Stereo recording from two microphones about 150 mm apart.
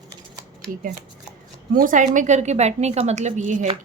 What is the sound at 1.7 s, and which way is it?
A woman's voice, 60° right (ahead or behind).